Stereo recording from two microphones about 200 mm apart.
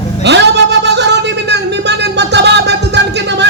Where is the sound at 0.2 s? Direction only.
60° right (ahead or behind).